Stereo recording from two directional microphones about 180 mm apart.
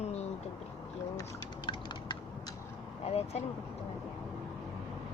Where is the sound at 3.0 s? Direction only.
35° left (ahead or behind).